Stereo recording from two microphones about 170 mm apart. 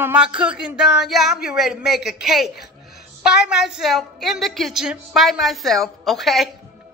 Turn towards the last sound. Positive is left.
turn(degrees=0)  # may be behind; listen again after turning